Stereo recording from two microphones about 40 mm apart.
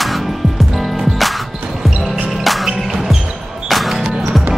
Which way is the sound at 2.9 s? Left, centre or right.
Centre.